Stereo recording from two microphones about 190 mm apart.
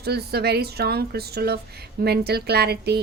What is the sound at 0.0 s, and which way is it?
A woman's voice, 55° right (ahead or behind).